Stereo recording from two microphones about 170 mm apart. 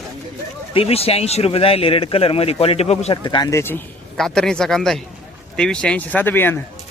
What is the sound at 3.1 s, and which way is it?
Speech, 25° left (ahead or behind).